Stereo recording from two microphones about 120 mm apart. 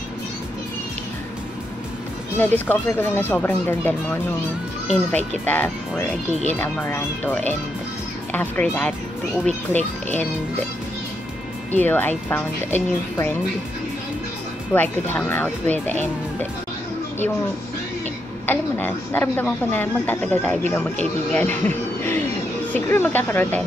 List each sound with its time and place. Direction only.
2.3 s speech: 15° left (ahead or behind)
11.7 s speech: 15° left (ahead or behind)
14.7 s speech: 15° left (ahead or behind)
18.5 s speech: 15° left (ahead or behind)